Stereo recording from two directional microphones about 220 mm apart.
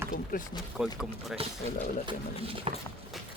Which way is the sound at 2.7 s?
25° right (ahead or behind).